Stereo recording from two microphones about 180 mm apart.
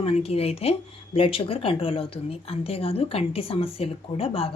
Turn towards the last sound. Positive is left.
turn(degrees=30)  # may be behind; listen again after turning